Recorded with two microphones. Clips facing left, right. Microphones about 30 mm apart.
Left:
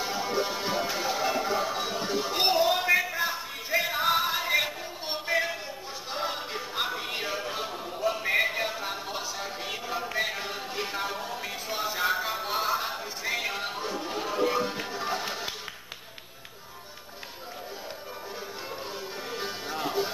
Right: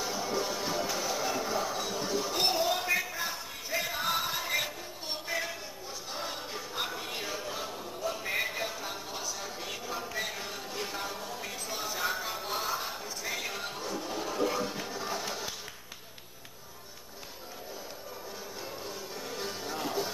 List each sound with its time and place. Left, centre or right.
0.0 s music: left
19.3 s music: left